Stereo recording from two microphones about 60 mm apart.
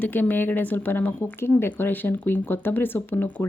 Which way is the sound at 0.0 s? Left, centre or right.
Left.